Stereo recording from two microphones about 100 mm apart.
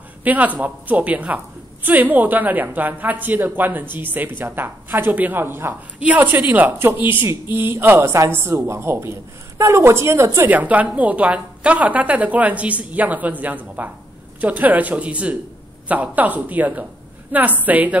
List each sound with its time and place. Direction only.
0.2 s a woman's voice: 15° right (ahead or behind)